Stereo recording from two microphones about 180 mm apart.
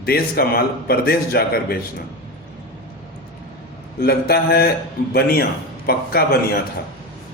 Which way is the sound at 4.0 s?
60° left (ahead or behind).